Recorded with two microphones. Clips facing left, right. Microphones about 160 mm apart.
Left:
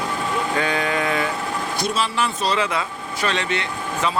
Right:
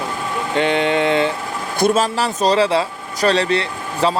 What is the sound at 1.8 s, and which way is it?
Speech, 50° right (ahead or behind).